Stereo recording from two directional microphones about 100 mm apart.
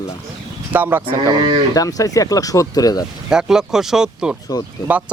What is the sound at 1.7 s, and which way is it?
Speech, 35° left (ahead or behind).